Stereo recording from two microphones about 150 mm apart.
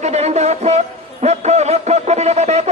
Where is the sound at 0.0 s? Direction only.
45° right (ahead or behind).